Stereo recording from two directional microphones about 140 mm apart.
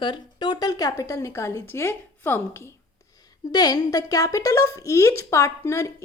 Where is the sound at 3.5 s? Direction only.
25° left (ahead or behind).